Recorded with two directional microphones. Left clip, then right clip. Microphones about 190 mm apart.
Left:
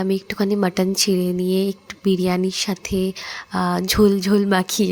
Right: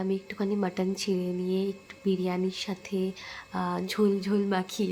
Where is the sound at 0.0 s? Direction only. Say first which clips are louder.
Left 9 dB; 30° left (ahead or behind).